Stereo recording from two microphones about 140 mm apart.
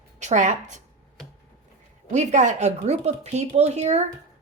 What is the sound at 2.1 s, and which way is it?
A woman's voice, 60° right (ahead or behind).